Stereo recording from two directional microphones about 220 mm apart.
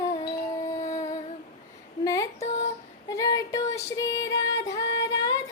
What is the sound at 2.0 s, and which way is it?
Female singing, 15° left (ahead or behind).